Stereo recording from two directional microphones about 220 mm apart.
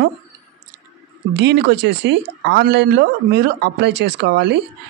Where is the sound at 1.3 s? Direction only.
50° right (ahead or behind).